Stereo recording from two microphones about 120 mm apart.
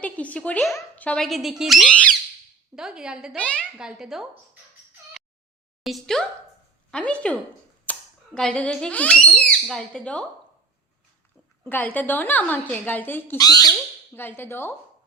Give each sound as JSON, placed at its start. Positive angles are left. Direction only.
{"t": 0.0, "sound": "speech", "side_deg": 10}
{"t": 1.9, "sound": "speech", "side_deg": 10}
{"t": 2.7, "sound": "a woman's voice", "side_deg": -5}
{"t": 3.3, "sound": "speech", "side_deg": 10}
{"t": 3.6, "sound": "speech", "side_deg": -5}
{"t": 5.8, "sound": "speech", "side_deg": 0}
{"t": 7.9, "sound": "cap gun", "side_deg": 15}
{"t": 8.4, "sound": "speech", "side_deg": 5}
{"t": 11.6, "sound": "speech", "side_deg": 15}
{"t": 13.4, "sound": "squawk", "side_deg": 30}
{"t": 14.2, "sound": "speech", "side_deg": 20}